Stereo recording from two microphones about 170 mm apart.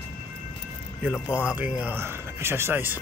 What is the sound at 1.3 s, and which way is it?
Speech, 5° right (ahead or behind).